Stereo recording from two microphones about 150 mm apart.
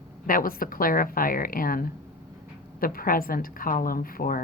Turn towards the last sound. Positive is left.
turn(degrees=70)  # may be behind; listen again after turning